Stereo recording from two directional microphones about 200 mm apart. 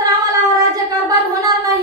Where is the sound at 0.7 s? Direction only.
20° right (ahead or behind).